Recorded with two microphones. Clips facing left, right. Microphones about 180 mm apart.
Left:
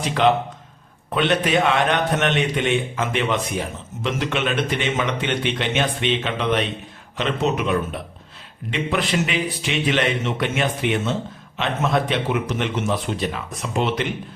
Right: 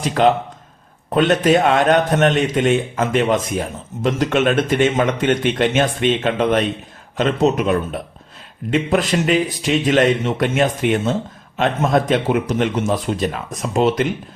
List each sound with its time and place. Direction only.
0.0 s a man's voice: 40° right (ahead or behind)